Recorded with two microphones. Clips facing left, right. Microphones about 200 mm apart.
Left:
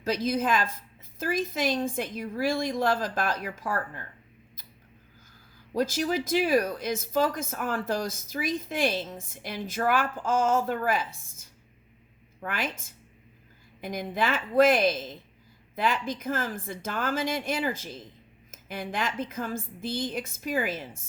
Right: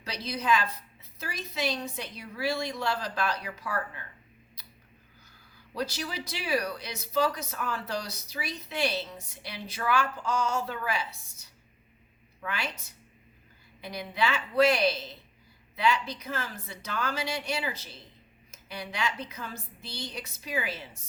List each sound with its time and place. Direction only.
0.0 s speech: 50° left (ahead or behind)
5.7 s speech: 45° left (ahead or behind)